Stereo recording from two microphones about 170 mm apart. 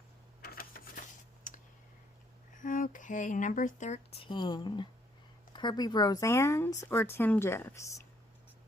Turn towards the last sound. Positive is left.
turn(degrees=15)  # may be behind; listen again after turning